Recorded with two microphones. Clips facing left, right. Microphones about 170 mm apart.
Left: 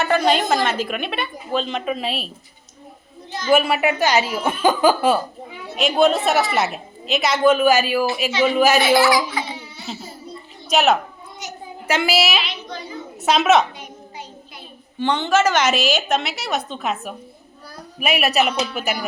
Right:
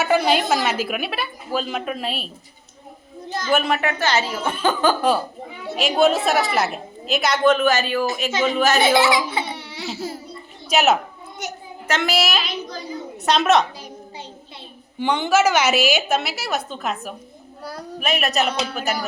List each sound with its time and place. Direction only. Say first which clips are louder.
0.0 s a woman's voice: even; 5° right (ahead or behind)
3.5 s speech: left 4 dB; 5° left (ahead or behind)
5.7 s a woman's voice: left 1 dB; centre (ahead or behind)
9.0 s speech: left 1 dB; 25° right (ahead or behind)
9.6 s baby cry: right 3 dB; 85° right
10.7 s a woman's voice: left 1 dB; centre (ahead or behind)
12.4 s a child's voice: right 1 dB; 40° right (ahead or behind)
13.2 s a woman's voice: left 1 dB; 5° left (ahead or behind)
14.9 s a woman's voice: even; 10° right (ahead or behind); by 18.9 s 10° left (ahead or behind)